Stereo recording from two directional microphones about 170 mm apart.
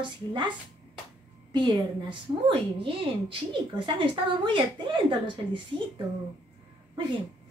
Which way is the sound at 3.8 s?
30° right (ahead or behind).